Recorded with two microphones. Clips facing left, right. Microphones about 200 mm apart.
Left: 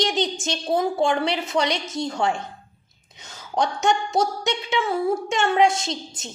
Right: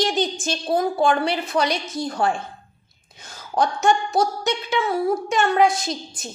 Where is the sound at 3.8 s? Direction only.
25° left (ahead or behind).